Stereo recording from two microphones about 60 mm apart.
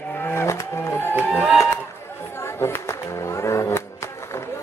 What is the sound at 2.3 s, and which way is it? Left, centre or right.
Music, left.